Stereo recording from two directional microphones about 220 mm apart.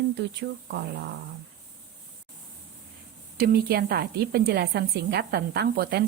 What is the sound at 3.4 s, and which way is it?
A woman's voice, 45° right (ahead or behind).